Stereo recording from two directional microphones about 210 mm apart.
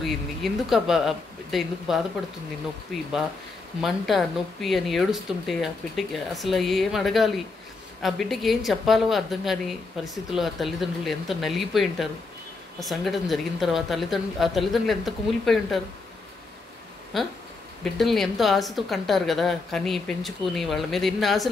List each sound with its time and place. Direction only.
0.0 s a woman's voice: centre (ahead or behind)
17.1 s a woman's voice: centre (ahead or behind)